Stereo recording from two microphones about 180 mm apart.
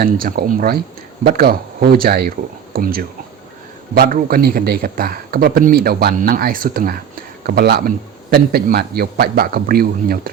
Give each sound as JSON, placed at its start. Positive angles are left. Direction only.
{"t": 0.0, "sound": "speech", "side_deg": -55}